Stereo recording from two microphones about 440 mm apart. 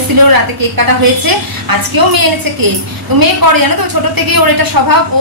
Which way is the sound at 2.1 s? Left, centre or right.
Right.